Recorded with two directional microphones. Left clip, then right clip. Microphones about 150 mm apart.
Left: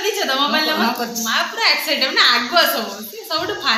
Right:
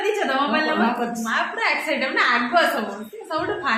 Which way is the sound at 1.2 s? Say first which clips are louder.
Left 6 dB; 15° left (ahead or behind).